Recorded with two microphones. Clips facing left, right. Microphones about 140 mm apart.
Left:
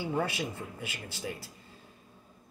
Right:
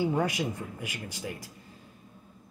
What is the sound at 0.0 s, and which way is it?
Speech, 15° right (ahead or behind).